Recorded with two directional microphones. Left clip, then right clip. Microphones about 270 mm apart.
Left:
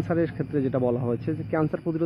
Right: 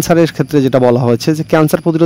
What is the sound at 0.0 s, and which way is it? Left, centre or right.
Speech, right.